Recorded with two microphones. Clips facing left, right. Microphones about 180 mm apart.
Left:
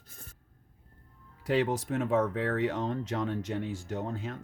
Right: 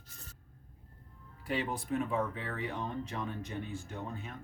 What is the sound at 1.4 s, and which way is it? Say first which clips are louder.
Speech: left 7 dB; 90° left.